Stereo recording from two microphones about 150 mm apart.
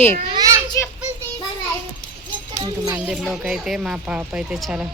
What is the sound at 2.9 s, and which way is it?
Speech, 5° right (ahead or behind).